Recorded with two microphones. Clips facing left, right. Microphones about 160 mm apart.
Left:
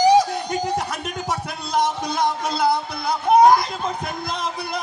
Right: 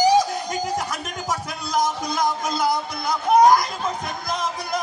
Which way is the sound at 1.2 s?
30° left (ahead or behind).